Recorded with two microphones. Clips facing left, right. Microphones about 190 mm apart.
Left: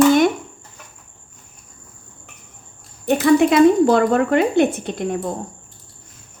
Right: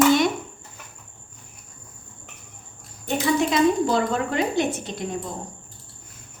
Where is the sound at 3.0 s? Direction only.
60° left (ahead or behind).